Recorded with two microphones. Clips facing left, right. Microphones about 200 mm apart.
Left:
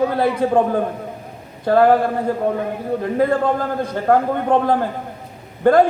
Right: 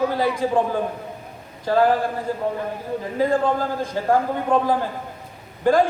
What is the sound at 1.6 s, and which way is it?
Speech, 60° left (ahead or behind).